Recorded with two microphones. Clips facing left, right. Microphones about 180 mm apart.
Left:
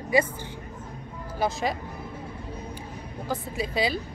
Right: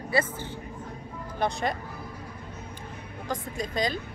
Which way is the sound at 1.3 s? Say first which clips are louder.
Left 1 dB; 5° left (ahead or behind).